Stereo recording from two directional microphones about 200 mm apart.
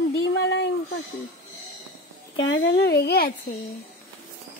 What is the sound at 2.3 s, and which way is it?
Speech, 65° left (ahead or behind).